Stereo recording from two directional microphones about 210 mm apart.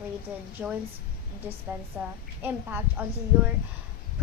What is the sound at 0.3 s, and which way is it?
Speech, 5° right (ahead or behind).